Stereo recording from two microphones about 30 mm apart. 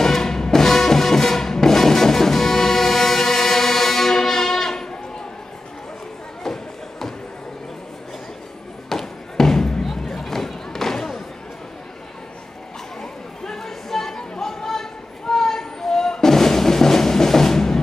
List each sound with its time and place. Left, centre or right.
0.0 s music: centre
6.4 s music: centre
8.8 s basketball bounce: centre
10.0 s a sound: centre
13.0 s chatter: centre
14.4 s a sound: centre